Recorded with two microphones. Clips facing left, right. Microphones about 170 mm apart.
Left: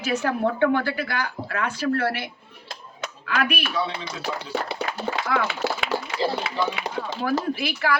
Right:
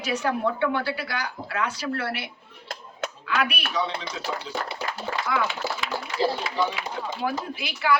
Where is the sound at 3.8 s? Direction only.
15° right (ahead or behind).